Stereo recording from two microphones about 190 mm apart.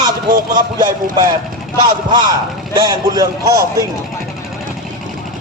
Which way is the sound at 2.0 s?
20° right (ahead or behind).